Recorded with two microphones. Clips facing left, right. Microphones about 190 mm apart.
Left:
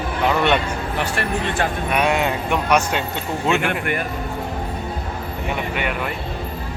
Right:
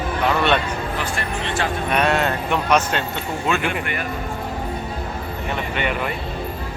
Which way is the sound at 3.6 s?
50° left (ahead or behind).